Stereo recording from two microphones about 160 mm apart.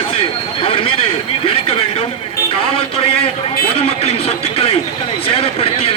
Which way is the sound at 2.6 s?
35° left (ahead or behind).